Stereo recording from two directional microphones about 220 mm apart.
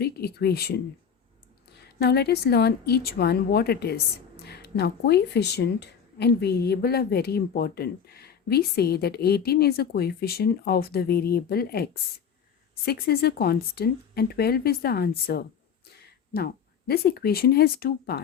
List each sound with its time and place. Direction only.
0.0 s speech: 45° left (ahead or behind)
2.0 s speech: 45° left (ahead or behind)
16.3 s speech: 45° left (ahead or behind)